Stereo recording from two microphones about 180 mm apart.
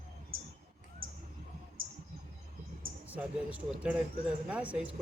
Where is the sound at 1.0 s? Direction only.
50° right (ahead or behind).